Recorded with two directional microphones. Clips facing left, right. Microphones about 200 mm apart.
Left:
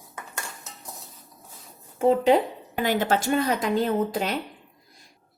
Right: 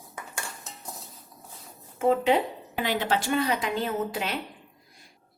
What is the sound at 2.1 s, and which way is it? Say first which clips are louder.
Speech: left 3 dB; 35° left (ahead or behind).